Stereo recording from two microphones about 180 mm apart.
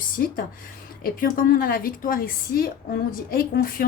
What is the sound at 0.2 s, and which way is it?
A woman's voice, 55° left (ahead or behind).